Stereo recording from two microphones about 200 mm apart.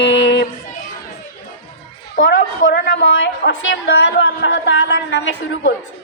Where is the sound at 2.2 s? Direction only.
50° left (ahead or behind).